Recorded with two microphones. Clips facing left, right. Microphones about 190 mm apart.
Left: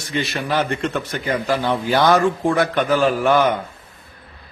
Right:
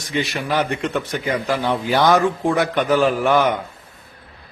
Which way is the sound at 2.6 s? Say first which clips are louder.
Even; 15° right (ahead or behind).